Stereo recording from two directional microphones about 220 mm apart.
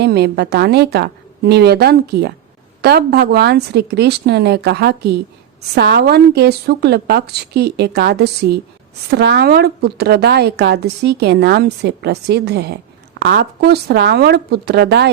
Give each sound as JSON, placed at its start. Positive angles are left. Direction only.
{"t": 0.0, "sound": "a woman's voice", "side_deg": -50}